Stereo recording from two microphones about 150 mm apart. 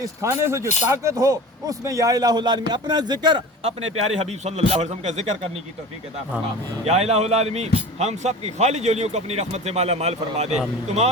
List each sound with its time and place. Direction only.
0.0 s speech: 20° right (ahead or behind); by 5.5 s 45° right (ahead or behind)
6.8 s speech: 45° right (ahead or behind)